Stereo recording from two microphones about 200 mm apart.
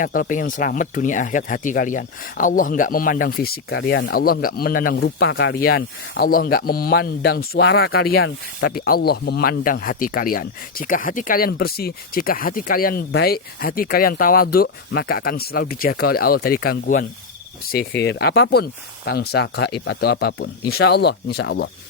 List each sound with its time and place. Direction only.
0.0 s speech: 45° left (ahead or behind); by 4.1 s 65° left (ahead or behind)
4.1 s speech: 50° left (ahead or behind)